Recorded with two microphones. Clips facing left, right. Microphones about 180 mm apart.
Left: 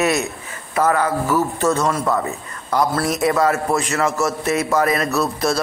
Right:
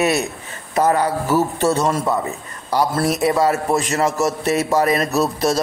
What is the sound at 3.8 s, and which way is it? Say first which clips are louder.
Speech: right 1 dB; 40° right (ahead or behind).